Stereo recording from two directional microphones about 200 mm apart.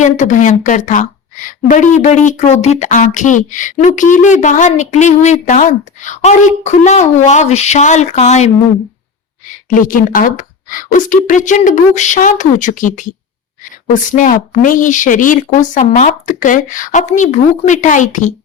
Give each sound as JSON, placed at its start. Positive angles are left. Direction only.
{"t": 0.0, "sound": "a woman's voice", "side_deg": 40}
{"t": 9.6, "sound": "a woman's voice", "side_deg": 40}